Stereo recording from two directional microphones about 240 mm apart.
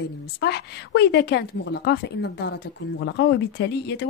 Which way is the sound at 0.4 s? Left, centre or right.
Left.